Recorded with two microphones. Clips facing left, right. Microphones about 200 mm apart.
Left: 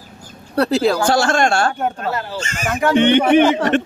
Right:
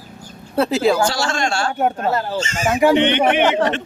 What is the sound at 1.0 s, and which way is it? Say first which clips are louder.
A man's voice: left 5 dB; 55° left (ahead or behind).